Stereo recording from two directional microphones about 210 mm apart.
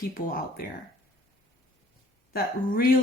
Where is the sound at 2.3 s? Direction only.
45° left (ahead or behind).